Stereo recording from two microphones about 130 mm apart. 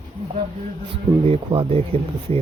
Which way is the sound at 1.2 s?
45° right (ahead or behind).